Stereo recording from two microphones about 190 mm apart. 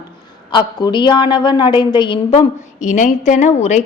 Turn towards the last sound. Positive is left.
turn(degrees=35)  # may be behind; listen again after turning